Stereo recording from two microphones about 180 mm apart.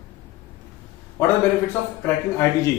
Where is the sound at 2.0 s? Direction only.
15° left (ahead or behind).